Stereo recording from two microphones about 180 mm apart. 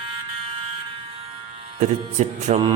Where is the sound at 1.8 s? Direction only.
40° right (ahead or behind).